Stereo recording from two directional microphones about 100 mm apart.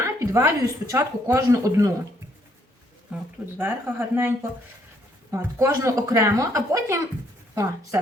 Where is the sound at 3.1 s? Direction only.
10° right (ahead or behind).